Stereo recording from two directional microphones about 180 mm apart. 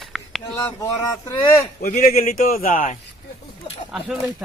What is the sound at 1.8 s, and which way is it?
A man's voice, 50° left (ahead or behind).